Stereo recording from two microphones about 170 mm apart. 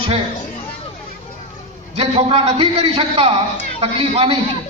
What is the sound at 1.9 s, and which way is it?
A man's voice, 35° right (ahead or behind).